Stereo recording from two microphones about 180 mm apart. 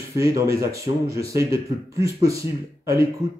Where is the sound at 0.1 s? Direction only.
15° right (ahead or behind).